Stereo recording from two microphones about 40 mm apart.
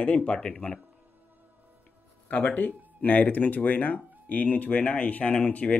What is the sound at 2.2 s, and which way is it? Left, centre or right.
Speech, left.